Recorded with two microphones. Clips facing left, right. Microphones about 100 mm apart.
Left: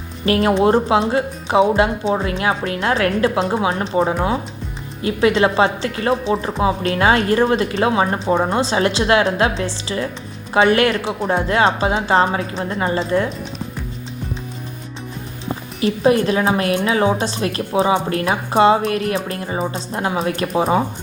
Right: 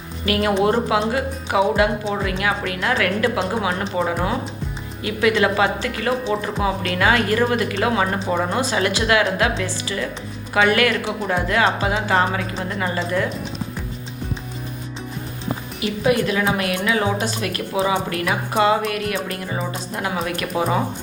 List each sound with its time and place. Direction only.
0.3 s a woman's voice: 30° left (ahead or behind)
5.0 s speech: 30° left (ahead or behind)
15.8 s a woman's voice: 35° left (ahead or behind)